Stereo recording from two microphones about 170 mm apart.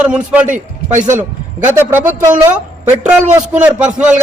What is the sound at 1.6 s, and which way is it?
Speech, 10° right (ahead or behind).